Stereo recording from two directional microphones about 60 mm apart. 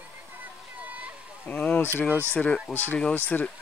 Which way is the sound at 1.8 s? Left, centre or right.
Left.